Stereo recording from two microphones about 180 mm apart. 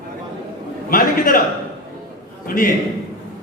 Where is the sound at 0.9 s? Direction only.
50° left (ahead or behind).